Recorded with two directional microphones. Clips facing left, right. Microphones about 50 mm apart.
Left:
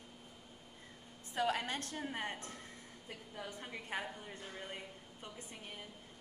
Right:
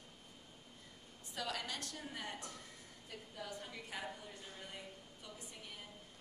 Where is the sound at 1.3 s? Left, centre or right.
Left.